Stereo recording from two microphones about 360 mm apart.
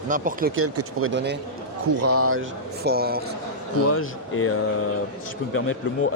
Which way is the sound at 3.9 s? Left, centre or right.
Left.